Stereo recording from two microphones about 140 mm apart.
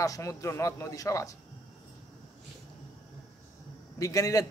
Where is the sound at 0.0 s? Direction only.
25° left (ahead or behind).